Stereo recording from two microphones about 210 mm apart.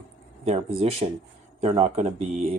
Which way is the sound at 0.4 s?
30° right (ahead or behind).